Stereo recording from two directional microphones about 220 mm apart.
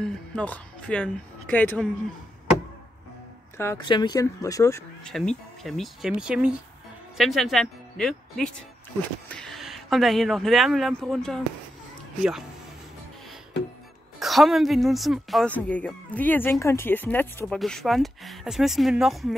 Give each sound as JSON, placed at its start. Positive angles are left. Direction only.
{"t": 0.0, "sound": "speech", "side_deg": 5}
{"t": 3.5, "sound": "speech", "side_deg": 15}
{"t": 5.6, "sound": "a woman's voice", "side_deg": 0}
{"t": 14.2, "sound": "a woman's voice", "side_deg": 0}